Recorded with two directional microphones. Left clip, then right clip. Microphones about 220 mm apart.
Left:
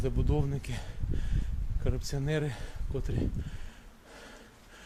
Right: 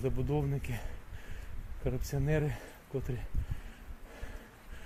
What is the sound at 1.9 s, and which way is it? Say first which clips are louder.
Speech: even; centre (ahead or behind).